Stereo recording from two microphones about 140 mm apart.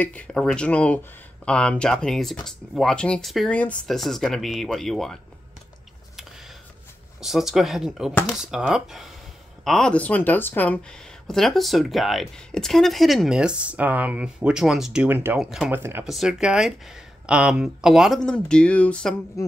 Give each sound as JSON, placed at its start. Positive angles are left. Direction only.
{"t": 0.0, "sound": "speech", "side_deg": 10}
{"t": 7.2, "sound": "speech", "side_deg": -5}
{"t": 15.3, "sound": "speech", "side_deg": -5}
{"t": 15.7, "sound": "speech", "side_deg": -15}
{"t": 16.1, "sound": "speech", "side_deg": -5}
{"t": 19.4, "sound": "a sound", "side_deg": 25}